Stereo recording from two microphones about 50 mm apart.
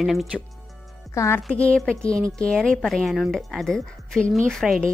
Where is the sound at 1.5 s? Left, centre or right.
Left.